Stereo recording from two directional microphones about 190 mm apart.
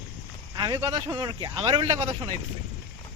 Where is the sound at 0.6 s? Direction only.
20° right (ahead or behind).